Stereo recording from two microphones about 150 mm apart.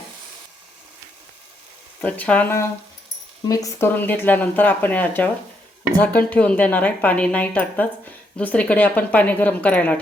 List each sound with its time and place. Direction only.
2.0 s speech: 10° left (ahead or behind)